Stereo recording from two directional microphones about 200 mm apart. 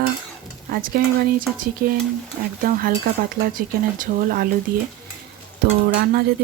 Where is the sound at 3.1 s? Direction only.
45° right (ahead or behind).